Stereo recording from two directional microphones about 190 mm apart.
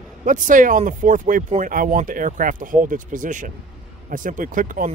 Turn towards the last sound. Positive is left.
turn(degrees=-45)  # may be behind; listen again after turning